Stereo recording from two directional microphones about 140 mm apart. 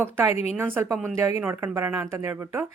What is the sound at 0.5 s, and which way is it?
Speech, 15° right (ahead or behind).